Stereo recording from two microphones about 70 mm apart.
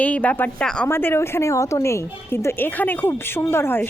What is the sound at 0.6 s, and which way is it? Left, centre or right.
Speech, centre.